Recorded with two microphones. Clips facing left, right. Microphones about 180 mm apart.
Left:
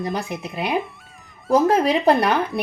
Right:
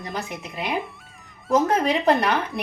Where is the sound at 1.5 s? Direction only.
30° left (ahead or behind).